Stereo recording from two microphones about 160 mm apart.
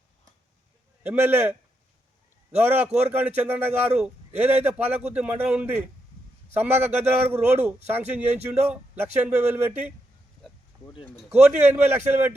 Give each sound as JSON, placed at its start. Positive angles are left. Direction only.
{"t": 1.0, "sound": "a man's voice", "side_deg": -10}
{"t": 10.7, "sound": "a sound", "side_deg": -25}
{"t": 11.3, "sound": "a man's voice", "side_deg": -15}